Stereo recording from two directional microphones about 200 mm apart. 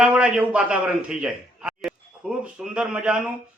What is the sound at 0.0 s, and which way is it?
A man's voice, 5° right (ahead or behind).